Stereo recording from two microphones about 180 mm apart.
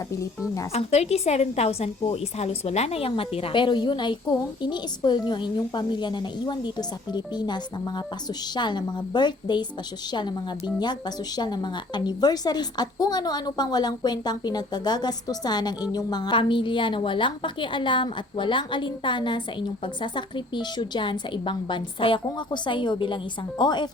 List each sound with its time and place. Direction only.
0.1 s speech: 15° left (ahead or behind)
0.7 s a woman's voice: 35° left (ahead or behind)
11.3 s a woman's voice: 25° left (ahead or behind)